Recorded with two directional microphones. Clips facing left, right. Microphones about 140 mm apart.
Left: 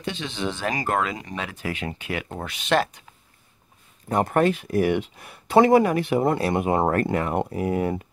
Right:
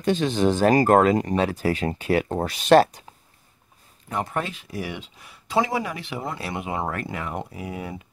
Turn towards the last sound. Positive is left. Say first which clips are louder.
# left 9 dB
turn(degrees=50)  # may be behind; listen again after turning